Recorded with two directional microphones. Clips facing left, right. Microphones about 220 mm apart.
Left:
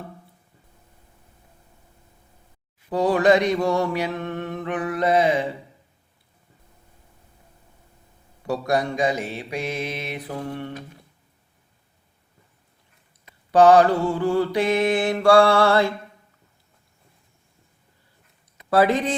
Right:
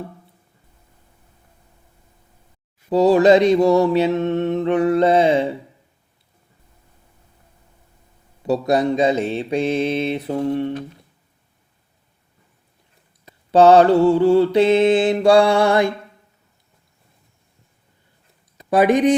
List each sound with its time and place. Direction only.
2.9 s mantra: 25° right (ahead or behind)
8.4 s mantra: 20° right (ahead or behind)
13.5 s mantra: 25° right (ahead or behind)
18.7 s speech: 15° right (ahead or behind)